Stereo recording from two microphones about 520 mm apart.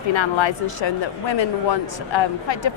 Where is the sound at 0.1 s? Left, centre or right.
Left.